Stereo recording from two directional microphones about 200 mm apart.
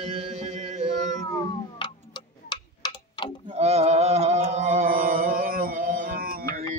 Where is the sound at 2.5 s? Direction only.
20° left (ahead or behind).